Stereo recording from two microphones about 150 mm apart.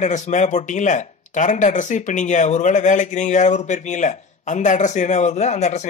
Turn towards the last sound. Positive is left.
turn(degrees=50)  # may be behind; listen again after turning